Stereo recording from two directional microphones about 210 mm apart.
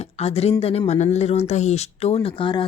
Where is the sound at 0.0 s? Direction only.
30° left (ahead or behind).